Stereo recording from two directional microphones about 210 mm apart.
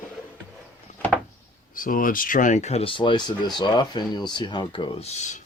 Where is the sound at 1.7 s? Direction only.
40° left (ahead or behind).